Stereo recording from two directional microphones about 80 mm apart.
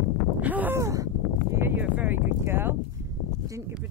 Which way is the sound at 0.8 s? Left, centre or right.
Right.